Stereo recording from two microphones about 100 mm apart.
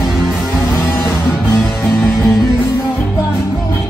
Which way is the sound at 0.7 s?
25° left (ahead or behind).